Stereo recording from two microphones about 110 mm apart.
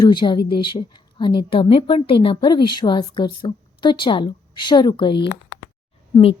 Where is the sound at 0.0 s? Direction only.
45° left (ahead or behind).